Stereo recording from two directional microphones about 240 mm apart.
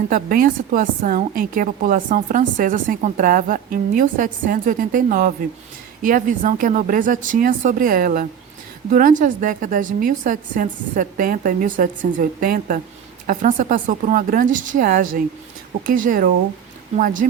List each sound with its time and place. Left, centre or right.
0.1 s a woman's voice: right